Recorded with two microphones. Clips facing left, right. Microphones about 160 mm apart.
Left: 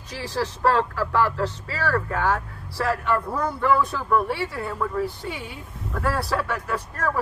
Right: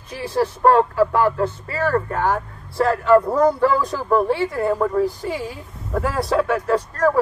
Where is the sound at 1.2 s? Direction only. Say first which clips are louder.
Right 5 dB; 25° right (ahead or behind).